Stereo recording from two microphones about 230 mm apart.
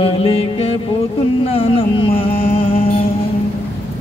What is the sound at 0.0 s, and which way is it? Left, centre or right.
Music, left.